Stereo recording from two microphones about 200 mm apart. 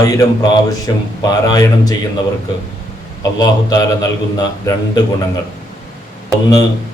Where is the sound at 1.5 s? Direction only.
20° left (ahead or behind).